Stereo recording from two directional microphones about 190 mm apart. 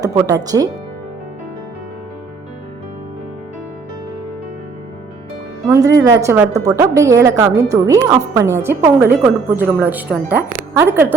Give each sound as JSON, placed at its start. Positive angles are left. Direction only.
{"t": 0.0, "sound": "speech", "side_deg": -20}
{"t": 5.6, "sound": "a woman's voice", "side_deg": -15}